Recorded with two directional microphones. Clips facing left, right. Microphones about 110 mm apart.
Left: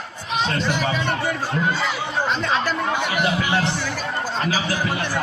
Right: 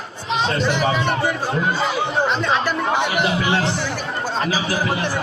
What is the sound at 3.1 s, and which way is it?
Speech, 25° right (ahead or behind).